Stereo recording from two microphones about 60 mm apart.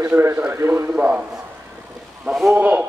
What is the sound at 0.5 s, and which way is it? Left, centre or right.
Speech, right.